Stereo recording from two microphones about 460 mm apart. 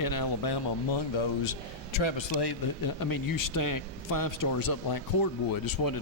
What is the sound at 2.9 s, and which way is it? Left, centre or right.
A man's voice, left.